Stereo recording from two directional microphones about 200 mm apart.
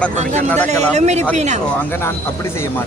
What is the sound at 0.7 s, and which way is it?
Speech, 35° right (ahead or behind).